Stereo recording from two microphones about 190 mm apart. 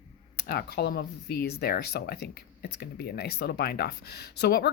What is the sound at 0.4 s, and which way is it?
Speech, 55° left (ahead or behind).